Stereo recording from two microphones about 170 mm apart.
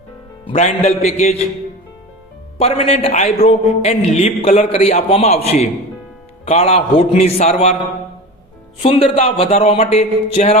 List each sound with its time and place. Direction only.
0.4 s a man's voice: 40° left (ahead or behind)
2.6 s a man's voice: 35° left (ahead or behind)
8.8 s a man's voice: 35° left (ahead or behind)